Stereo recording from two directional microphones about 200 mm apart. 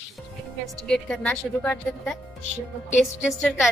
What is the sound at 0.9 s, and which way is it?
A man's voice, 5° left (ahead or behind).